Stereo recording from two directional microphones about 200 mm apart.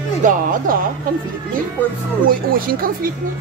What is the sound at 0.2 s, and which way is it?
Speech, 40° right (ahead or behind).